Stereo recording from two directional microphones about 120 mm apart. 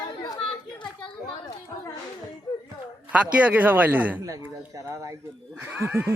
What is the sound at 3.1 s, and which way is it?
Speech, 10° right (ahead or behind).